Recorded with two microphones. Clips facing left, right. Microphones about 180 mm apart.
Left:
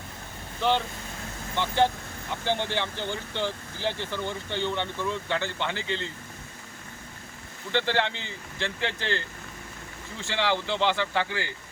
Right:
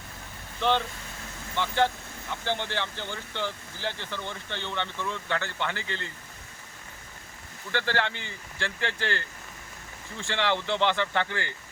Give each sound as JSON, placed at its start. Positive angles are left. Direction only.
{"t": 1.5, "sound": "speech", "side_deg": 15}
{"t": 7.7, "sound": "speech", "side_deg": 20}